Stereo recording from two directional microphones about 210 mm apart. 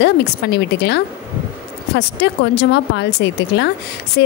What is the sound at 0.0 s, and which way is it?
Speech, 55° left (ahead or behind).